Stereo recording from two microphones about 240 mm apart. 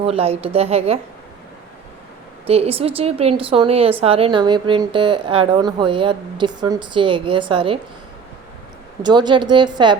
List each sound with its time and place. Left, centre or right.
0.0 s a woman's voice: right
2.5 s a woman's voice: right
9.0 s a woman's voice: centre